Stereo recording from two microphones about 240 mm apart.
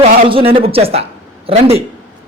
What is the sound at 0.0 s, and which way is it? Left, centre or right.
A man's voice, right.